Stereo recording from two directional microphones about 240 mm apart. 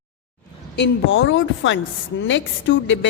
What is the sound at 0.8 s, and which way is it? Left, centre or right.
A woman's voice, left.